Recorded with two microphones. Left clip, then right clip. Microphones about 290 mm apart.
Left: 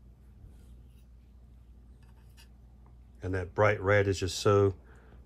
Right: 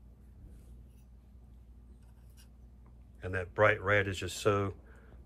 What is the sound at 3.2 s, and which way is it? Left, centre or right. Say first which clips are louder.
Speech: left 1 dB; centre.